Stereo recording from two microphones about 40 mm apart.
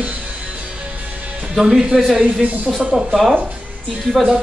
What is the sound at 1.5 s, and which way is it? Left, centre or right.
A man's voice, centre.